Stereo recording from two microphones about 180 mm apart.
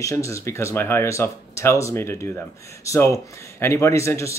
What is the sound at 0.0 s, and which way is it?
Speech, 15° left (ahead or behind).